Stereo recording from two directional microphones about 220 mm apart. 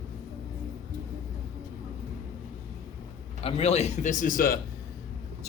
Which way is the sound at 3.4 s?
25° left (ahead or behind).